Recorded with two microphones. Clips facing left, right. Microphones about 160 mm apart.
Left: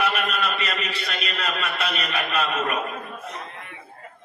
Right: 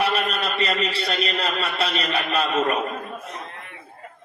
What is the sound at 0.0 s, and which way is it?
A man's voice, 30° right (ahead or behind).